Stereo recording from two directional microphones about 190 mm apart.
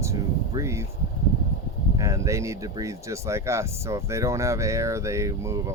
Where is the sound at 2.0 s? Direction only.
15° right (ahead or behind).